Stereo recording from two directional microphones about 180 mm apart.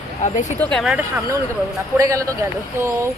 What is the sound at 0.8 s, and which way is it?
Speech, 5° right (ahead or behind).